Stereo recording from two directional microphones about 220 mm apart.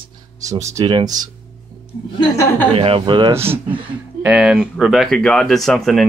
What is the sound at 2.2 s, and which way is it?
Speech, 15° left (ahead or behind).